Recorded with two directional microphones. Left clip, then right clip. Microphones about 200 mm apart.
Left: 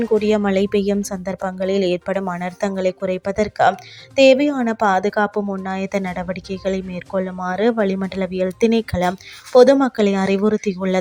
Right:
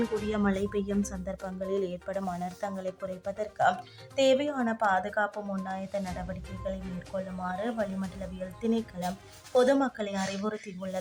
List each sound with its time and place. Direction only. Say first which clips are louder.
0.3 s speech: left 13 dB; 35° left (ahead or behind)